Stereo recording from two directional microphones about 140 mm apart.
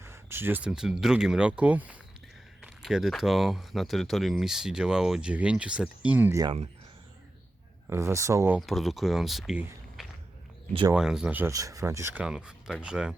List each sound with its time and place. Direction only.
0.0 s speech: 15° right (ahead or behind)
7.9 s speech: 20° right (ahead or behind)
8.5 s speech: centre (ahead or behind)
11.5 s speech: 25° right (ahead or behind)
12.2 s speech: 5° right (ahead or behind)